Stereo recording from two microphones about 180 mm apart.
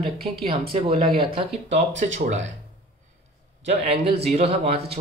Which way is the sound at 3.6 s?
35° right (ahead or behind).